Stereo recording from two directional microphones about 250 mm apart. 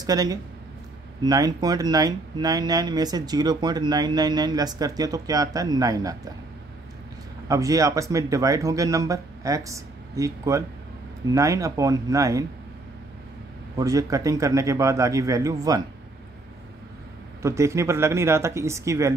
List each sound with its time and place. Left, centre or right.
0.0 s speech: centre
7.4 s speech: centre
13.7 s speech: centre
17.4 s speech: centre